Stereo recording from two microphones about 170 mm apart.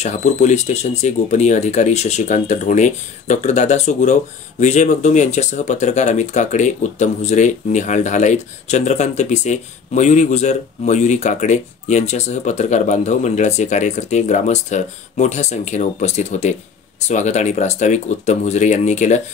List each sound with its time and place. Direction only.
0.0 s speech: 45° left (ahead or behind)